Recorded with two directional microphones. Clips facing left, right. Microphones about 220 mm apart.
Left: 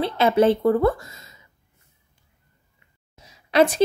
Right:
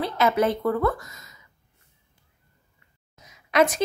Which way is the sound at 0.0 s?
30° left (ahead or behind).